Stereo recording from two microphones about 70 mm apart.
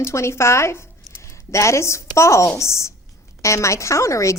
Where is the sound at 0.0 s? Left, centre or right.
Left.